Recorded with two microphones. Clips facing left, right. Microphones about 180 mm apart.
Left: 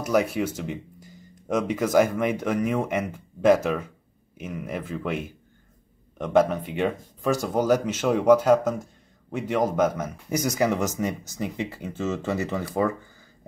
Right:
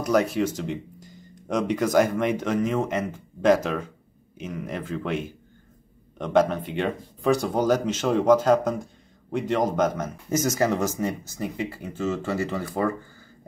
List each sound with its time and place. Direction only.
0.0 s speech: 10° left (ahead or behind)